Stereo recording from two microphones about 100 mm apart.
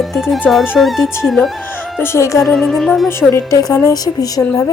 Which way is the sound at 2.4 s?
Centre (ahead or behind).